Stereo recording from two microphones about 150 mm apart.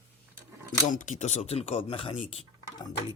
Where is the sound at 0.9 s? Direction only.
55° left (ahead or behind); by 3.0 s 40° left (ahead or behind).